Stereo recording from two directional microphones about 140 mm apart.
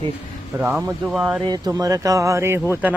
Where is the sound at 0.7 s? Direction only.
5° right (ahead or behind).